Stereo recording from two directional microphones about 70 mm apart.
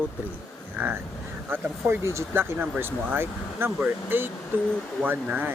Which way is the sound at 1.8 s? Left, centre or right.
Right.